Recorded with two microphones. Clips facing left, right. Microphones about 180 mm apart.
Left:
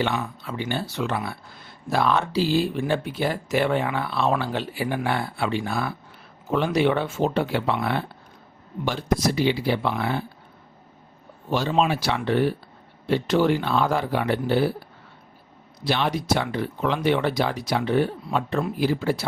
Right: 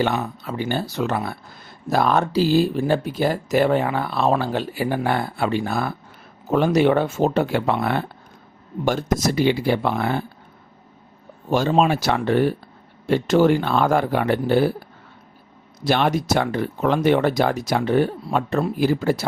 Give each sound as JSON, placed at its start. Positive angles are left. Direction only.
{"t": 0.0, "sound": "speech", "side_deg": -40}
{"t": 11.5, "sound": "speech", "side_deg": -50}
{"t": 15.8, "sound": "speech", "side_deg": -50}